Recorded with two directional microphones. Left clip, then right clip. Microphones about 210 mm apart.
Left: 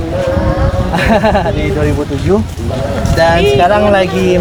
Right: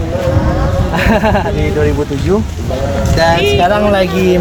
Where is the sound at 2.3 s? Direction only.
20° left (ahead or behind).